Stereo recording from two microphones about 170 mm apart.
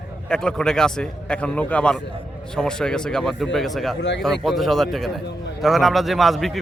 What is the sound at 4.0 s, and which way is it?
Speech, 90° left.